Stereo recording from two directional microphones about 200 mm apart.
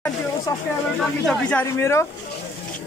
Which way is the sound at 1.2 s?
5° left (ahead or behind).